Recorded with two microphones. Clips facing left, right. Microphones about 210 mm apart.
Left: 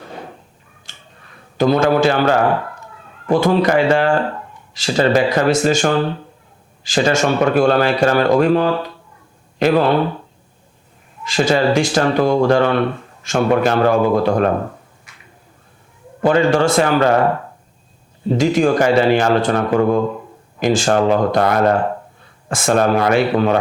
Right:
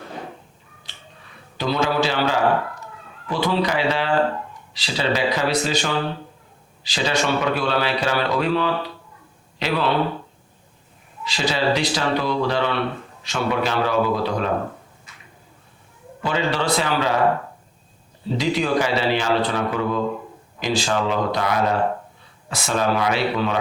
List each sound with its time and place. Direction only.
0.9 s finger snapping: 45° left (ahead or behind)
1.5 s speech: 50° left (ahead or behind)
11.2 s speech: 50° left (ahead or behind)
16.2 s speech: 50° left (ahead or behind)
18.3 s speech: 50° left (ahead or behind)